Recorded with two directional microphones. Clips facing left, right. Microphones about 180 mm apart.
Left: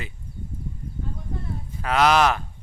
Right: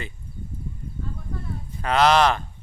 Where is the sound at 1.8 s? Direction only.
5° left (ahead or behind).